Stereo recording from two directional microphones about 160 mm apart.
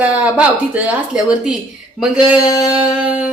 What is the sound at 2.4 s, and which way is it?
Music, 25° left (ahead or behind).